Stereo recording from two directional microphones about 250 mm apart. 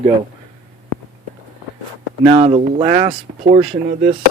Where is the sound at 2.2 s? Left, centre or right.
Centre.